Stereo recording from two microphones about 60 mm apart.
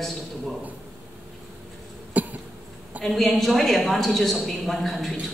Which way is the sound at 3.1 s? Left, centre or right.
Centre.